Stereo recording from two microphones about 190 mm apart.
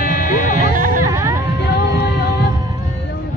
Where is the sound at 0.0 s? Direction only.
50° left (ahead or behind).